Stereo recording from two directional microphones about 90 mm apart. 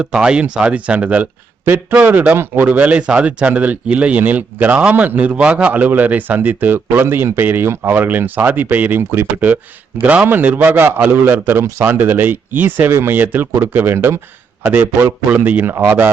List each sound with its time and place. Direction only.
0.0 s speech: 10° right (ahead or behind)